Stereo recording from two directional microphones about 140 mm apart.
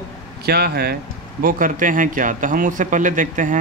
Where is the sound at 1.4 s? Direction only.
80° right.